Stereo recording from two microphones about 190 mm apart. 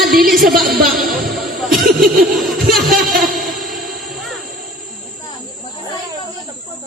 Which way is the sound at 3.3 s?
Centre (ahead or behind).